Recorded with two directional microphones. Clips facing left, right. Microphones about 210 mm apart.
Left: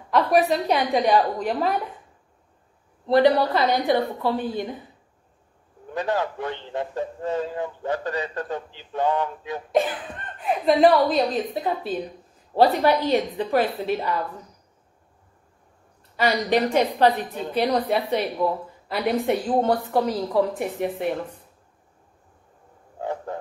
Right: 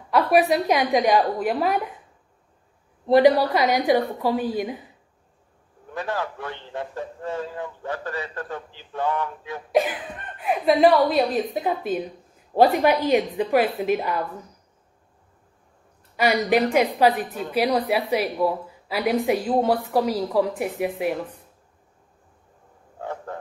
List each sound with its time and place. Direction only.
0.1 s speech: 10° right (ahead or behind)
3.1 s speech: 15° right (ahead or behind)
5.9 s a man's voice: 20° left (ahead or behind)
9.7 s speech: 10° right (ahead or behind)
16.2 s a woman's voice: 10° right (ahead or behind)
22.9 s a sound: 15° left (ahead or behind)